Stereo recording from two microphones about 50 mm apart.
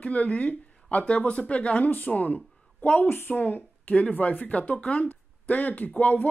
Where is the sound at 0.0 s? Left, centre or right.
Left.